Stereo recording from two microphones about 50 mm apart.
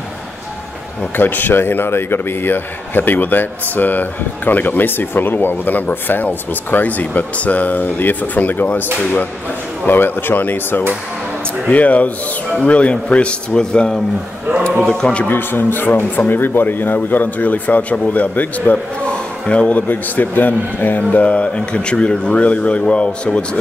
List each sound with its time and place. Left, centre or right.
1.1 s a man's voice: left
9.8 s a man's voice: left; by 15.2 s centre
15.2 s a man's voice: left
19.0 s a sound: centre
19.7 s speech: left; by 23.6 s centre